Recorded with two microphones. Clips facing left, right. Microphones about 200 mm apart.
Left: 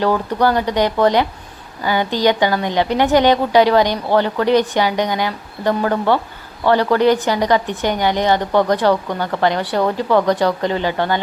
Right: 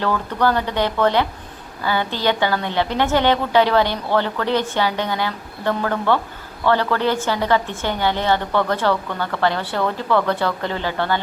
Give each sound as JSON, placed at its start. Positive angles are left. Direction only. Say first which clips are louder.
{"t": 0.0, "sound": "a woman's voice", "louder": "left 4 dB", "side_deg": 15}